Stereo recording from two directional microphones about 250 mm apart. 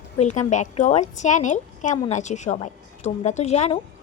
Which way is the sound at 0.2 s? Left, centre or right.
Left.